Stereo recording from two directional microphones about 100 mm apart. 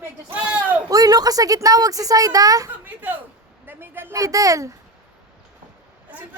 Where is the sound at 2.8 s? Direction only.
15° right (ahead or behind).